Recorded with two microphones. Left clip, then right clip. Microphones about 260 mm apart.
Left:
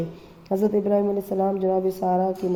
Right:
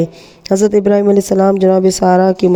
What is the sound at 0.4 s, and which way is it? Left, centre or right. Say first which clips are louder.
Speech: right 11 dB; right.